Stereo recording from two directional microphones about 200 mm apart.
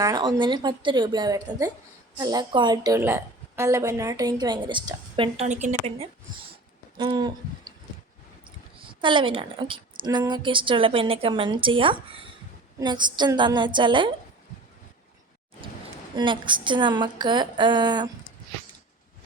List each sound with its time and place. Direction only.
0.0 s a woman's voice: 20° right (ahead or behind)
6.9 s hoot: 20° right (ahead or behind)
8.9 s a woman's voice: 25° right (ahead or behind)
16.1 s a woman's voice: 25° right (ahead or behind)